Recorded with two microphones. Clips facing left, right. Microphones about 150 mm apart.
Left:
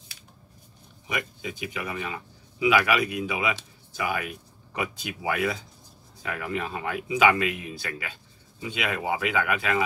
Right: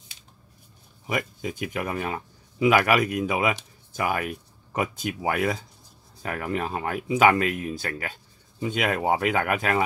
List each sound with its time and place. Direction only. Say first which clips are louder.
1.0 s speech: right 4 dB; 45° right (ahead or behind)